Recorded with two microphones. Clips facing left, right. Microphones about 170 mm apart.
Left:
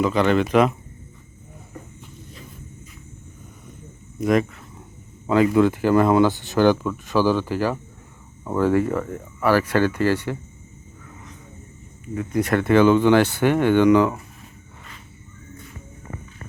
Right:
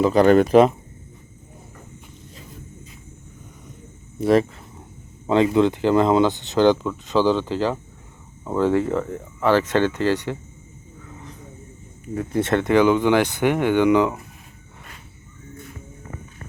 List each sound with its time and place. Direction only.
0.0 s speech: 40° right (ahead or behind)
4.2 s speech: 30° right (ahead or behind)
12.0 s speech: 40° right (ahead or behind); by 14.1 s 15° right (ahead or behind)